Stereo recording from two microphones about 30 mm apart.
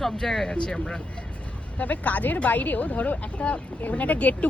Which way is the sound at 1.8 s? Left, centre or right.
Left.